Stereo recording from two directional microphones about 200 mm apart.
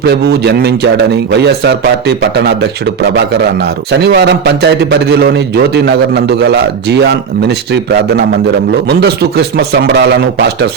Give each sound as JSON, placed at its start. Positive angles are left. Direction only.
{"t": 0.0, "sound": "a man's voice", "side_deg": -55}